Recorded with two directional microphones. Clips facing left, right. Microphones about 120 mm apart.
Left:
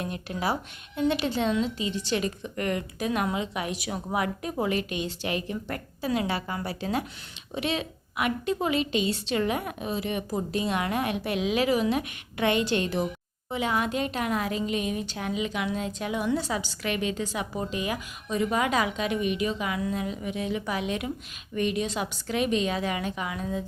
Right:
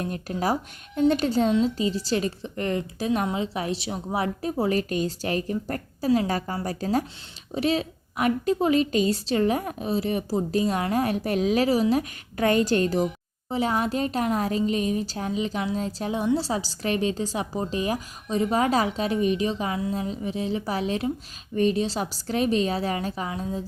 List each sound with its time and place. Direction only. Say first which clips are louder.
0.0 s a woman's voice: right 3 dB; 40° right (ahead or behind)